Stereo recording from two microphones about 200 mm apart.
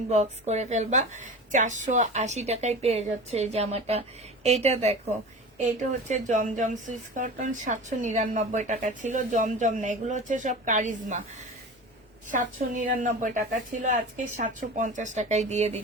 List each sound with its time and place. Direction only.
0.1 s speech: 35° right (ahead or behind)
6.1 s speech: 35° right (ahead or behind)
12.3 s speech: 40° right (ahead or behind)